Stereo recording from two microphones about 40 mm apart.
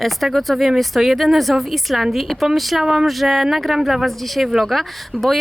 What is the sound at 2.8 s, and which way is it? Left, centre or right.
Speech, centre.